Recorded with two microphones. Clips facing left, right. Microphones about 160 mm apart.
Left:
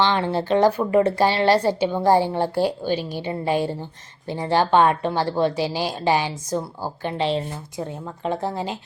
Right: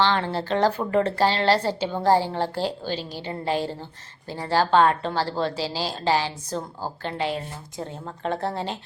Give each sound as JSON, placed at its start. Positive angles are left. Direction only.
{"t": 0.0, "sound": "speech", "side_deg": 15}